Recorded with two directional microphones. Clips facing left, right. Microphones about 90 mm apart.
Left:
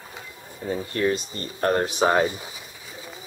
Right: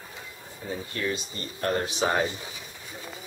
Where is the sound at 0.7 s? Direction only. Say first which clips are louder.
Left 7 dB; 40° left (ahead or behind).